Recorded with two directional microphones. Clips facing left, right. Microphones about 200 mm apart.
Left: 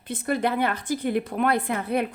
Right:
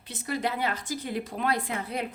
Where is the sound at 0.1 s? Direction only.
55° left (ahead or behind).